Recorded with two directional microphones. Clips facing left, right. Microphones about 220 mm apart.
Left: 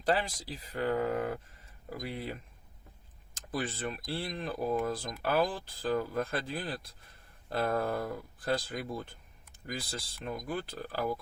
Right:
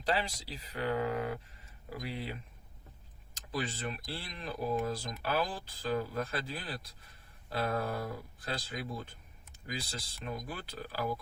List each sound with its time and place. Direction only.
0.0 s speech: 50° left (ahead or behind)